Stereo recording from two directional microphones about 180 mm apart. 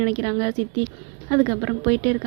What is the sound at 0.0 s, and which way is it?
A woman's voice, 25° right (ahead or behind).